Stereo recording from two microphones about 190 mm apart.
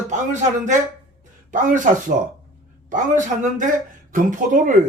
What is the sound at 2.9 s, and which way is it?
A man's voice, 40° right (ahead or behind).